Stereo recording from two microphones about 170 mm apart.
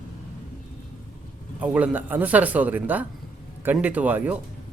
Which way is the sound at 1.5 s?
10° right (ahead or behind).